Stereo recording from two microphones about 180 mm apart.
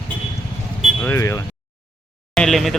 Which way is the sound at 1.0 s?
15° left (ahead or behind).